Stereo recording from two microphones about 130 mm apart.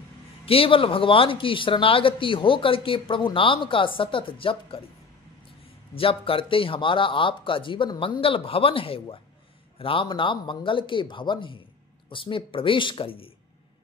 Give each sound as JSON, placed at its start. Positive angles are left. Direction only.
{"t": 0.5, "sound": "speech", "side_deg": 45}
{"t": 5.9, "sound": "speech", "side_deg": 45}